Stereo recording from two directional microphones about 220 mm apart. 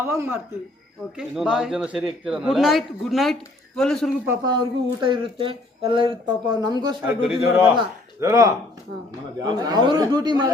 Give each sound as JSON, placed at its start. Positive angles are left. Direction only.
{"t": 0.0, "sound": "a man's voice", "side_deg": -10}
{"t": 4.3, "sound": "speech", "side_deg": -20}